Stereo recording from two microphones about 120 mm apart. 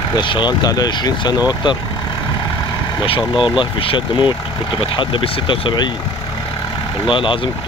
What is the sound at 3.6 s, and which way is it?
Speech, 45° left (ahead or behind).